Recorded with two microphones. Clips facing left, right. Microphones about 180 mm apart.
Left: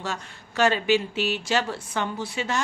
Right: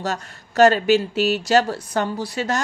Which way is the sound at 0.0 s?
40° right (ahead or behind).